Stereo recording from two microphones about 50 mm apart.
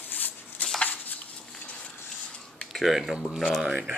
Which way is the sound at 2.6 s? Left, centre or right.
Centre.